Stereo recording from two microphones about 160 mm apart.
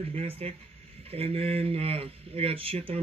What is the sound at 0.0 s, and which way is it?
Speech, 35° right (ahead or behind).